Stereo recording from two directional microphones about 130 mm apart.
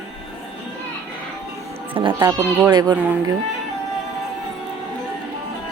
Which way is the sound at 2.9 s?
15° right (ahead or behind).